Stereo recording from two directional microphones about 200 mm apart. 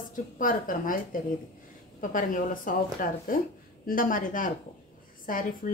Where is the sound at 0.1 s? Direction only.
45° left (ahead or behind).